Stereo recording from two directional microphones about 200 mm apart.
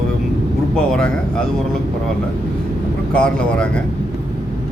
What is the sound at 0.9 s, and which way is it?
Speech, 5° left (ahead or behind).